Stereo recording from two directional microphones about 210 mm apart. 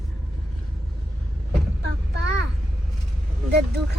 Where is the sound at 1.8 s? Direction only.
55° right (ahead or behind).